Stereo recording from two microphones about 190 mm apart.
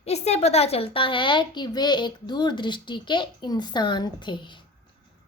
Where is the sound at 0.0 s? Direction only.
35° left (ahead or behind).